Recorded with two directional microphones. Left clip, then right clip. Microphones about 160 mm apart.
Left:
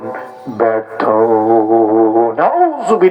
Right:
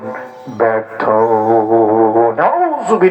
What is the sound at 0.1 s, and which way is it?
Music, 35° left (ahead or behind).